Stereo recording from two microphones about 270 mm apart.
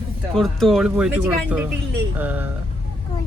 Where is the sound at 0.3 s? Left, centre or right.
Centre.